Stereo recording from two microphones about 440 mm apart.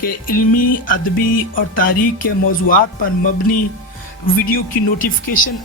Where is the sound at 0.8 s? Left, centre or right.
Centre.